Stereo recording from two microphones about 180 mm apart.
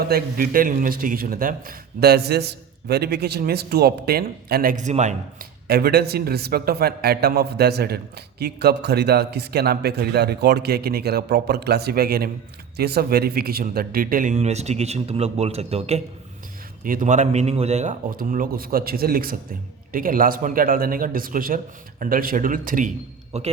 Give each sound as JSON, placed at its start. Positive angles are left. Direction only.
{"t": 0.1, "sound": "a man's voice", "side_deg": -55}
{"t": 5.6, "sound": "a man's voice", "side_deg": -60}
{"t": 16.8, "sound": "a man's voice", "side_deg": -45}
{"t": 23.3, "sound": "a man's voice", "side_deg": -40}